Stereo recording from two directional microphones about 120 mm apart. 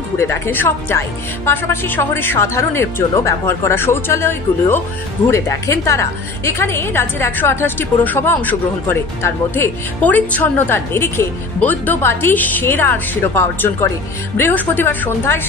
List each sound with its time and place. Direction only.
0.2 s a woman's voice: 20° left (ahead or behind)